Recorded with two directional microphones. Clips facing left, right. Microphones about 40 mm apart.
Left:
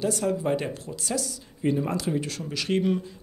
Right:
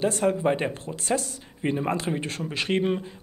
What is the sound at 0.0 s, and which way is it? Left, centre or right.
Speech, right.